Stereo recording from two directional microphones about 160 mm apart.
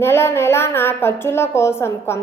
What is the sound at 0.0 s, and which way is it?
A woman's voice, 15° left (ahead or behind).